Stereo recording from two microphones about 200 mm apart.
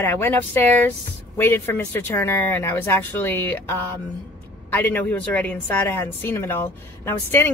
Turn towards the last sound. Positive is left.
turn(degrees=10)  # may be behind; listen again after turning